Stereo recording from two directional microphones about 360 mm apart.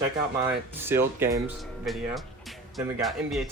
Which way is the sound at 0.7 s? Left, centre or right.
Centre.